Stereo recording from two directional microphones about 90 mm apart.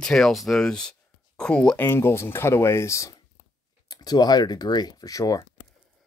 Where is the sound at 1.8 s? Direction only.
25° left (ahead or behind).